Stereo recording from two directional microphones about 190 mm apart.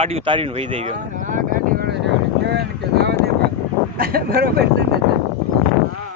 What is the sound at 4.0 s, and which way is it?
Speech, 50° right (ahead or behind).